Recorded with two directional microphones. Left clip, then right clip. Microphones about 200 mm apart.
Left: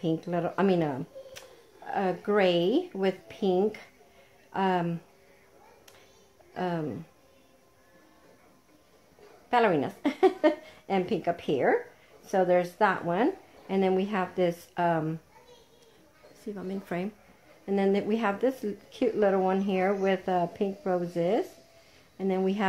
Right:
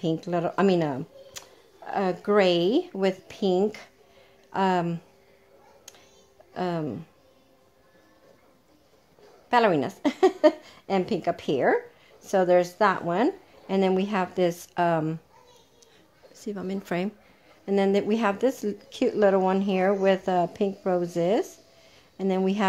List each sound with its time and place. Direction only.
0.0 s speech: 45° right (ahead or behind)
6.5 s speech: 45° right (ahead or behind)
9.5 s speech: 45° right (ahead or behind)
16.4 s speech: 45° right (ahead or behind)